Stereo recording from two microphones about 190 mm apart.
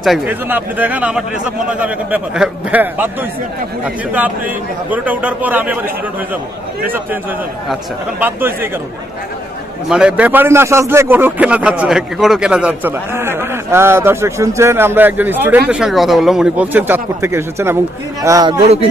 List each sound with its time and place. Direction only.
0.0 s a man's voice: 5° right (ahead or behind)
4.9 s a man's voice: 10° right (ahead or behind)
8.2 s a man's voice: 10° right (ahead or behind)
9.8 s a man's voice: 5° right (ahead or behind)